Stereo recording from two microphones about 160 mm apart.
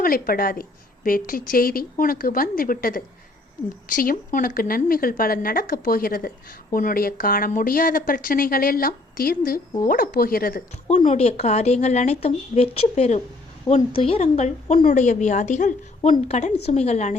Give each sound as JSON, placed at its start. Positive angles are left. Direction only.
{"t": 0.0, "sound": "a woman's voice", "side_deg": 65}
{"t": 10.8, "sound": "speech", "side_deg": 45}